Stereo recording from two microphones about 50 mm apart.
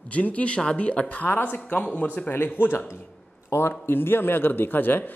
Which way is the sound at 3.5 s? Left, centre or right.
Left.